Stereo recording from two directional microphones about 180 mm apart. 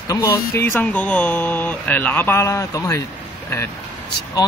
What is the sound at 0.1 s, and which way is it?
Speech, 15° left (ahead or behind).